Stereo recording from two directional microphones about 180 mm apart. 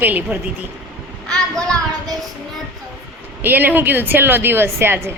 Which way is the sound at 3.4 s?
10° right (ahead or behind).